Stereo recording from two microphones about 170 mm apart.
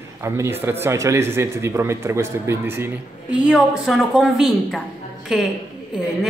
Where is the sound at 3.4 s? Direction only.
Centre (ahead or behind).